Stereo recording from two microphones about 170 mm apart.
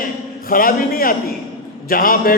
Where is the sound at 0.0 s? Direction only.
55° left (ahead or behind).